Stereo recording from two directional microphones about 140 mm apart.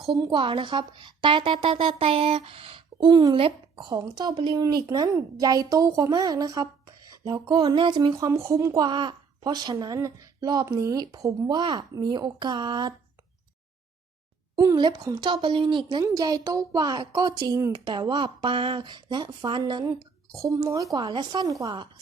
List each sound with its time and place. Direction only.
0.0 s a woman's voice: 30° right (ahead or behind)
14.5 s a woman's voice: 30° right (ahead or behind)